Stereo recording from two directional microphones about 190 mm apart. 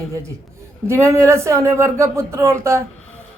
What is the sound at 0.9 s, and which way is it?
Speech, 15° right (ahead or behind).